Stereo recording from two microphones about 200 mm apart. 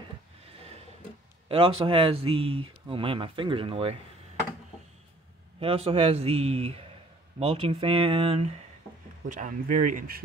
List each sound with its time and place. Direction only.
1.5 s speech: 25° right (ahead or behind)
5.6 s speech: 30° right (ahead or behind)
9.3 s speech: 40° right (ahead or behind)